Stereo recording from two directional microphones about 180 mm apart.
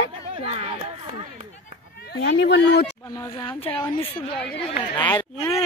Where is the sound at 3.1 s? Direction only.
15° left (ahead or behind).